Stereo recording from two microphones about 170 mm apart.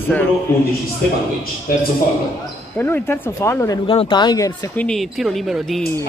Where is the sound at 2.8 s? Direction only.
10° left (ahead or behind).